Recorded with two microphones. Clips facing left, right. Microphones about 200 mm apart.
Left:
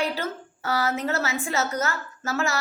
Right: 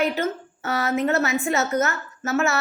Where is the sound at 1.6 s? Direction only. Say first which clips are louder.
Right 4 dB; 25° right (ahead or behind).